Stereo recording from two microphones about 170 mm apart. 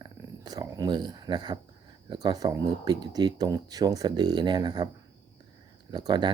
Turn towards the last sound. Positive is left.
turn(degrees=-25)  # may be behind; listen again after turning